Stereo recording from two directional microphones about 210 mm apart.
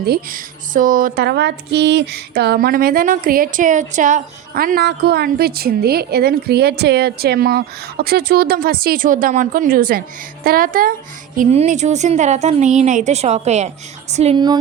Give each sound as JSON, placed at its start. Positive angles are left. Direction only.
{"t": 0.0, "sound": "a woman's voice", "side_deg": -45}